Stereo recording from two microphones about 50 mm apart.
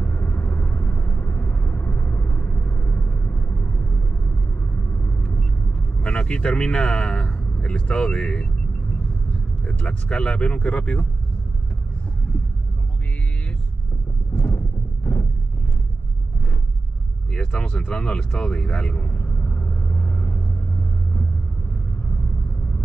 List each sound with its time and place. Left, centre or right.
0.0 s vehicle: left
4.9 s vehicle: left
5.2 s vehicle: left
6.0 s speech: left
9.7 s speech: left
14.3 s clip-clop: left
17.3 s a sound: centre; by 20.3 s left